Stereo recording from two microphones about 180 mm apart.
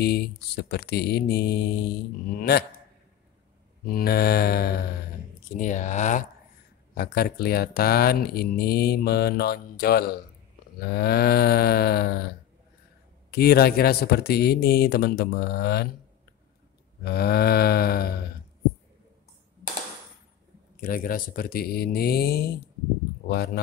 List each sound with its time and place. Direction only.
0.0 s speech: 65° left (ahead or behind)
3.8 s speech: 55° left (ahead or behind)
5.6 s speech: 40° left (ahead or behind)
7.0 s speech: 60° left (ahead or behind)
13.3 s speech: 60° left (ahead or behind)
17.0 s speech: 60° left (ahead or behind)
20.8 s speech: 50° left (ahead or behind)